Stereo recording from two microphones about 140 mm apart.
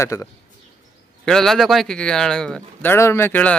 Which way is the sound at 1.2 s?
5° left (ahead or behind).